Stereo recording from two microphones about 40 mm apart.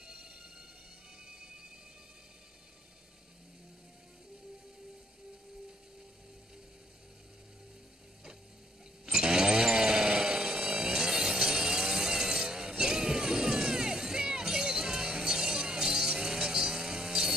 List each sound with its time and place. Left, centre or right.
0.0 s a sound: right
1.2 s music: centre
9.0 s chainsaw: centre